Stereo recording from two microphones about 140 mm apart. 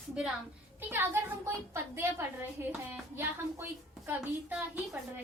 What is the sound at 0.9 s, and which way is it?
A woman's voice, 15° right (ahead or behind).